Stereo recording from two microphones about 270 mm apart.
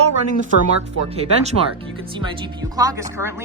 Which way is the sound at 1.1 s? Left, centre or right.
Right.